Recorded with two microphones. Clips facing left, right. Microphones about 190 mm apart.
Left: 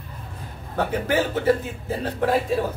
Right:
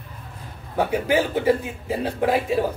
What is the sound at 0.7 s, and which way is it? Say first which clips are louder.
Speech: right 2 dB; 10° right (ahead or behind).